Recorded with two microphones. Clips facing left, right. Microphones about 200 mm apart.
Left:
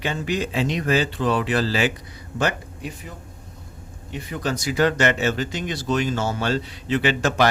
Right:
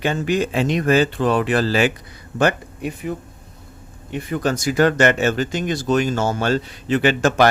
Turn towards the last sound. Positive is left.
turn(degrees=-50)  # may be behind; listen again after turning